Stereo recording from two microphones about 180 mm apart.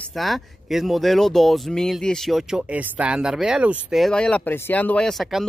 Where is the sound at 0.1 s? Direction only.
Centre (ahead or behind).